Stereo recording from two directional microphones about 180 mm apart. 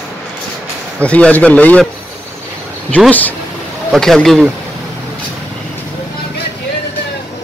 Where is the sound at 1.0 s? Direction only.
5° left (ahead or behind).